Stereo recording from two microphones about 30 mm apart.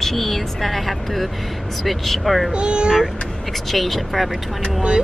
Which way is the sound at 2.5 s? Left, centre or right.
Right.